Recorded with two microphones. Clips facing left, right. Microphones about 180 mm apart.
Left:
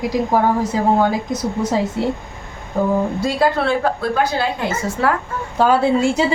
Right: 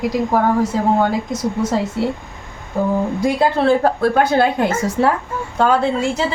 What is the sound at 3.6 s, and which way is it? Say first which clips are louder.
A woman's voice: right 4 dB; 40° right (ahead or behind).